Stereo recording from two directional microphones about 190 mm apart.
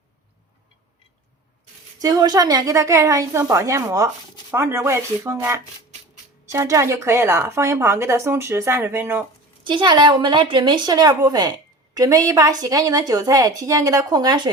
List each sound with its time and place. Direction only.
2.0 s a woman's voice: 20° right (ahead or behind)
9.6 s a woman's voice: 25° right (ahead or behind)